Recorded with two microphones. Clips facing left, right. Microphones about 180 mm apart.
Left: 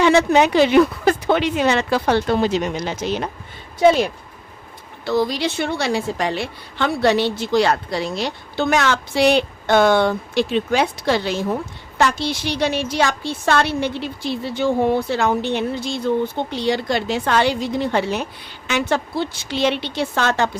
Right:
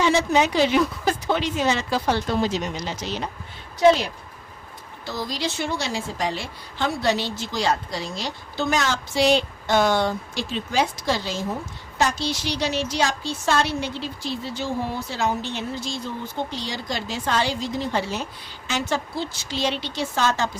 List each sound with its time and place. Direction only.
0.0 s a woman's voice: 60° left (ahead or behind)
5.0 s a woman's voice: 60° left (ahead or behind)